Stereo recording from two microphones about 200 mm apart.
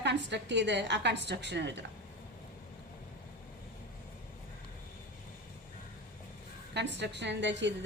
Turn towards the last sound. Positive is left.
turn(degrees=-60)  # may be behind; listen again after turning